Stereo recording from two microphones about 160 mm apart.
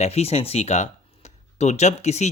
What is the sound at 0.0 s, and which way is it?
Speech, 40° left (ahead or behind).